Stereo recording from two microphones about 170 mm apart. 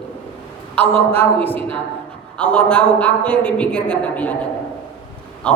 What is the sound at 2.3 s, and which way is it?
A man's voice, 5° left (ahead or behind).